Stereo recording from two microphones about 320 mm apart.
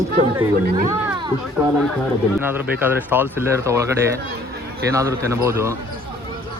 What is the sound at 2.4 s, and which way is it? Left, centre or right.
Speech, centre.